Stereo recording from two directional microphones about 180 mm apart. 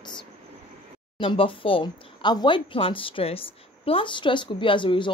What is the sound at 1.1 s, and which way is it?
Speech, 30° left (ahead or behind).